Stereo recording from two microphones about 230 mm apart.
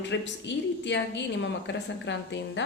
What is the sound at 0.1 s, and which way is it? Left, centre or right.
A woman's voice, left.